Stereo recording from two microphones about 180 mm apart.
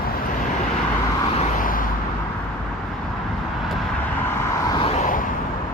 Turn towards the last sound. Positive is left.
turn(degrees=45)  # may be behind; listen again after turning